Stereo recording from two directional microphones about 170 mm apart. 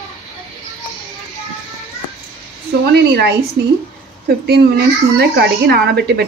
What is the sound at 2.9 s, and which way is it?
A woman's voice, 70° right (ahead or behind).